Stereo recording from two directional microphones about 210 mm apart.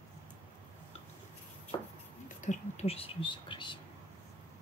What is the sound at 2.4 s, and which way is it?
Whispering, 35° left (ahead or behind).